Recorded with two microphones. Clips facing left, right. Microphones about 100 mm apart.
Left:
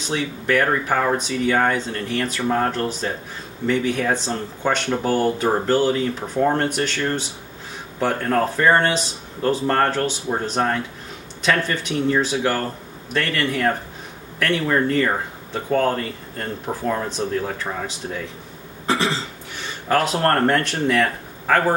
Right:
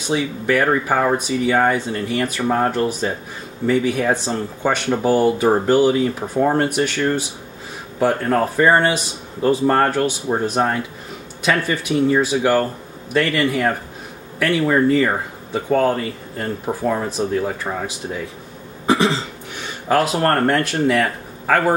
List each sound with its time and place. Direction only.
0.1 s speech: 10° right (ahead or behind)
18.9 s cough: 15° right (ahead or behind)
19.9 s speech: 5° right (ahead or behind)